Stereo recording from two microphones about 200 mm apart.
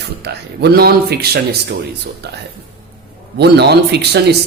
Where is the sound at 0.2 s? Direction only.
55° right (ahead or behind).